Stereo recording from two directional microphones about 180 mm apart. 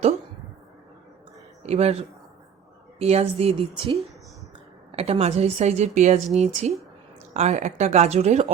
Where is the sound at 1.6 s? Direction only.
35° right (ahead or behind).